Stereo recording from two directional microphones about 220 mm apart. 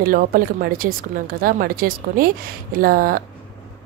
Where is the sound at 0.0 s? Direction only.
40° right (ahead or behind).